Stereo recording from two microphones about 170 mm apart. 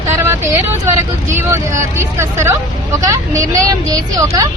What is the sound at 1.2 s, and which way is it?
A woman's voice, 15° right (ahead or behind).